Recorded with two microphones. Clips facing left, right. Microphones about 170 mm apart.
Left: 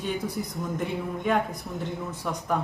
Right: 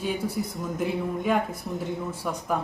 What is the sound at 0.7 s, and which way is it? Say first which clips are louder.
Speech: right 4 dB; 5° right (ahead or behind).